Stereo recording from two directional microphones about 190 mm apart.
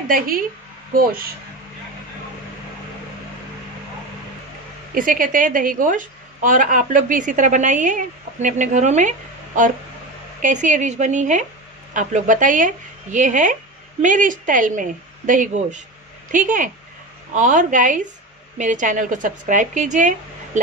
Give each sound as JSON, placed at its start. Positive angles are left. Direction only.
{"t": 4.9, "sound": "a woman's voice", "side_deg": -45}
{"t": 10.4, "sound": "a woman's voice", "side_deg": -40}